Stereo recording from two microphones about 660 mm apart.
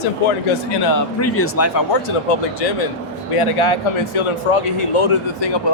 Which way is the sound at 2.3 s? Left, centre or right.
Left.